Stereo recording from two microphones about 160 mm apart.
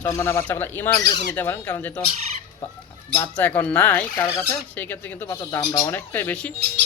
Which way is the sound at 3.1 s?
10° left (ahead or behind).